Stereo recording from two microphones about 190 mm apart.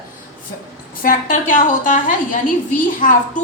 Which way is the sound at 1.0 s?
45° left (ahead or behind).